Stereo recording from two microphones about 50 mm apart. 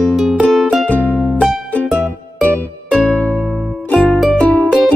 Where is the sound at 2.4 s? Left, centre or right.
Left.